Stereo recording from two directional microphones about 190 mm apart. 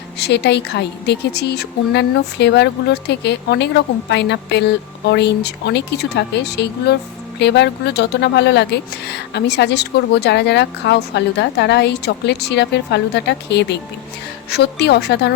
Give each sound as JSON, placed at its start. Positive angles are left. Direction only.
{"t": 0.2, "sound": "speech", "side_deg": 60}